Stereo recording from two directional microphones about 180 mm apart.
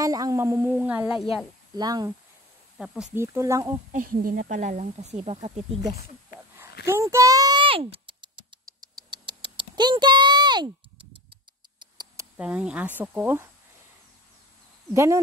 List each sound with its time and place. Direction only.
0.0 s speech: 20° right (ahead or behind)
1.8 s speech: 20° right (ahead or behind)
2.8 s speech: 5° right (ahead or behind)
3.2 s speech: 15° right (ahead or behind)
3.9 s speech: 50° right (ahead or behind)
6.9 s speech: 15° right (ahead or behind)
8.9 s a sound: 25° right (ahead or behind)
11.8 s a sound: 25° right (ahead or behind)
12.4 s speech: 5° right (ahead or behind)